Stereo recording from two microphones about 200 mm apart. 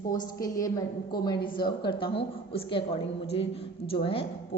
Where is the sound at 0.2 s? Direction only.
15° left (ahead or behind).